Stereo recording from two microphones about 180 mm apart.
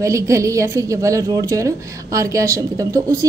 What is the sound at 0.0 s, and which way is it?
A woman's voice, 15° right (ahead or behind).